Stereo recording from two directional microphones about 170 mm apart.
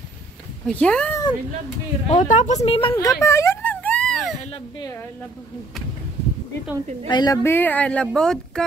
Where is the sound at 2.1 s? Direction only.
45° left (ahead or behind); by 4.3 s 5° left (ahead or behind).